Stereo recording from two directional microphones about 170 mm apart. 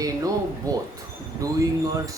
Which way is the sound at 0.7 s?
20° right (ahead or behind).